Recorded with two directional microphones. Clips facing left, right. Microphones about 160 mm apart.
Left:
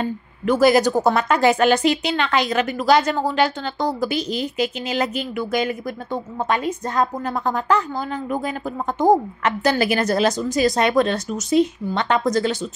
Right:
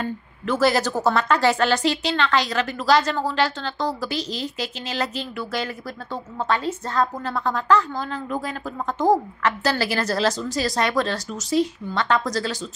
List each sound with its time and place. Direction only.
0.0 s a woman's voice: 15° left (ahead or behind)